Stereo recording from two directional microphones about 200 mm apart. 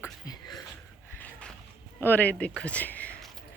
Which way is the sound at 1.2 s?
10° left (ahead or behind).